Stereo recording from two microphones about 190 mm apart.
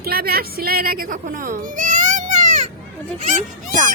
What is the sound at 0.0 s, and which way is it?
Speech, 55° right (ahead or behind).